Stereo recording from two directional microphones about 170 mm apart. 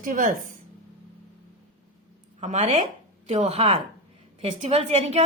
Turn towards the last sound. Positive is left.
turn(degrees=-35)  # may be behind; listen again after turning